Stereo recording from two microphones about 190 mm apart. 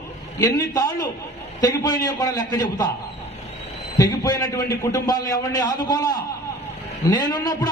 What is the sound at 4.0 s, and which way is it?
A man's voice, 15° left (ahead or behind).